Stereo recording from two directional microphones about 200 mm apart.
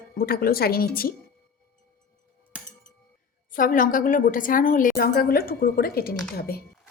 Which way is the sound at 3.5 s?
45° left (ahead or behind).